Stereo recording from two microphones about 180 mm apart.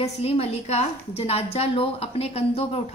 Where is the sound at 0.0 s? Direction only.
35° left (ahead or behind).